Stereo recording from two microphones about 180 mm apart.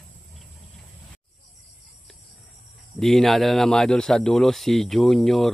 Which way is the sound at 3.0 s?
Centre (ahead or behind).